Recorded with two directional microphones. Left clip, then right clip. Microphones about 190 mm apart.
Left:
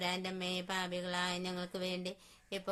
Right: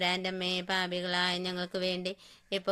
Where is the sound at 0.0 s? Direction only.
20° right (ahead or behind).